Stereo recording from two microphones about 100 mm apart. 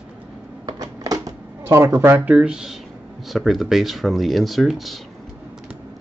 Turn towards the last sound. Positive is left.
turn(degrees=0)  # may be behind; listen again after turning